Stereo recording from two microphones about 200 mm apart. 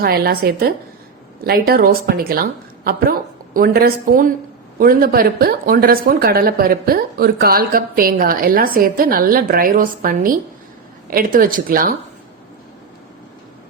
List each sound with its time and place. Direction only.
0.0 s speech: 50° right (ahead or behind)